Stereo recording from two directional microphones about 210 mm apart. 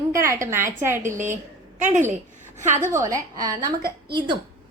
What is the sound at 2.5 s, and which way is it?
Speech, 35° right (ahead or behind).